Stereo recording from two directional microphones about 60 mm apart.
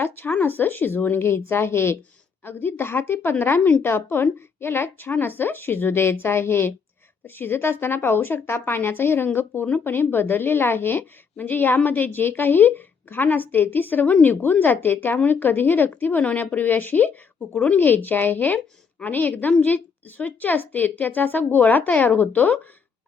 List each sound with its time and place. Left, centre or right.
0.3 s a woman's voice: left